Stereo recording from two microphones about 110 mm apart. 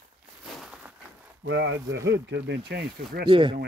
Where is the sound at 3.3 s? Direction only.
50° right (ahead or behind).